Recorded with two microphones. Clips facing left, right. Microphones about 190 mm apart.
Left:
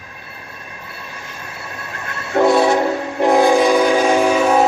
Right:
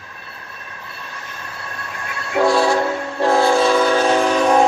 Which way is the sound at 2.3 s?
20° left (ahead or behind).